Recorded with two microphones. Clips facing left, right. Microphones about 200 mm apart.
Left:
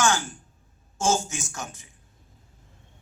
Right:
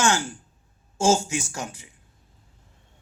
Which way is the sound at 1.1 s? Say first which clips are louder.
Right 4 dB; 30° right (ahead or behind).